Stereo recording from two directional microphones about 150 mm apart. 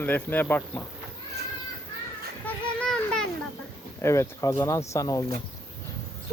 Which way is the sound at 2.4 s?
5° left (ahead or behind).